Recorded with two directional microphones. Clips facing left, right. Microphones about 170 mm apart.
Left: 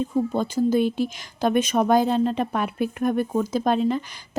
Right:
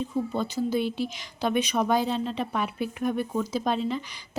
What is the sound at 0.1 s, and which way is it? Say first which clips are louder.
Speech: left 5 dB; 45° left (ahead or behind).